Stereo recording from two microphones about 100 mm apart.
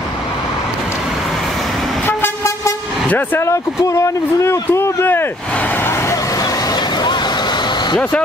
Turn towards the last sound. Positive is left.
turn(degrees=45)  # may be behind; listen again after turning